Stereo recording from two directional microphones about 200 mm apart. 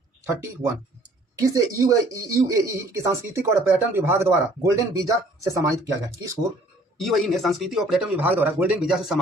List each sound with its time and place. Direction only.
1.4 s speech: 15° right (ahead or behind)
7.0 s speech: centre (ahead or behind)